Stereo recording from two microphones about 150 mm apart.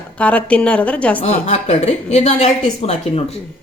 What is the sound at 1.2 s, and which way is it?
A woman's voice, 45° left (ahead or behind).